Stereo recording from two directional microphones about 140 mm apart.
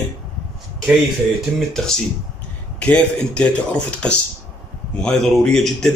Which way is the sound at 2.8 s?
10° left (ahead or behind).